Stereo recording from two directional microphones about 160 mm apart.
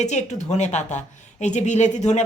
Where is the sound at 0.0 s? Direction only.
45° left (ahead or behind).